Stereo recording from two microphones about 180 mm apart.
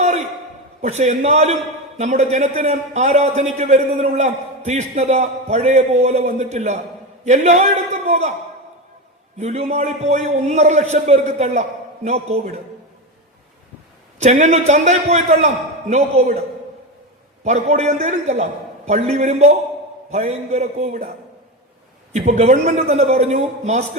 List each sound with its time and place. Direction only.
0.8 s a man's voice: 40° right (ahead or behind)
9.4 s a man's voice: 40° right (ahead or behind)
14.2 s a man's voice: 40° right (ahead or behind)
17.4 s a man's voice: 40° right (ahead or behind)
22.1 s a man's voice: 40° right (ahead or behind)